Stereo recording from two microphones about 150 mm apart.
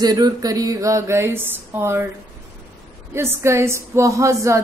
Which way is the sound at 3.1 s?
15° right (ahead or behind).